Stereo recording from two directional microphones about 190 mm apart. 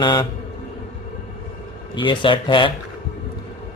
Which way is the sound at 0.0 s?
20° left (ahead or behind).